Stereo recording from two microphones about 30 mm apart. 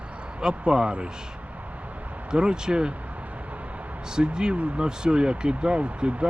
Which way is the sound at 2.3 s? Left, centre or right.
Right.